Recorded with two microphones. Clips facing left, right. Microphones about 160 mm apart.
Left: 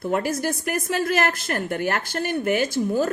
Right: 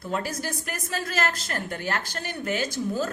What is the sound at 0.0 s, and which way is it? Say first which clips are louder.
A woman's voice: left 6 dB; 55° left (ahead or behind).